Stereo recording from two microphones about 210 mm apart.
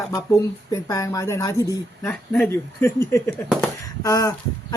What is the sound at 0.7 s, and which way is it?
Speech, 15° left (ahead or behind).